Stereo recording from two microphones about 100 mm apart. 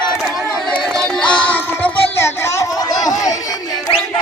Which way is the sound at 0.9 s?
5° left (ahead or behind).